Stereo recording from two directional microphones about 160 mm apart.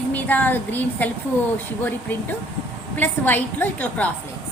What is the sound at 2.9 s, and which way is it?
A woman's voice, 10° left (ahead or behind).